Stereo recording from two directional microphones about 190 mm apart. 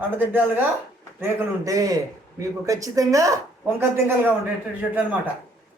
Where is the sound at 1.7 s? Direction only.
20° right (ahead or behind).